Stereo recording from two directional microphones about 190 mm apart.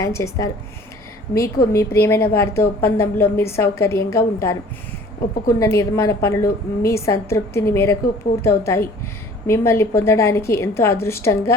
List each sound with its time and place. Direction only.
0.0 s a woman's voice: 15° left (ahead or behind)
5.5 s a woman's voice: 15° left (ahead or behind)